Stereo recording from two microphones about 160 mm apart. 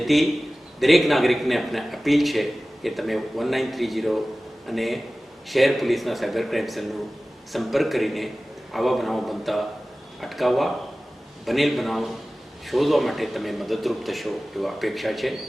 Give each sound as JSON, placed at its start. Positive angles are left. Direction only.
{"t": 0.0, "sound": "a man's voice", "side_deg": 0}